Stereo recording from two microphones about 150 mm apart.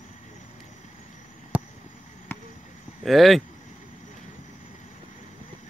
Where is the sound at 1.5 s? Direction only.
10° right (ahead or behind).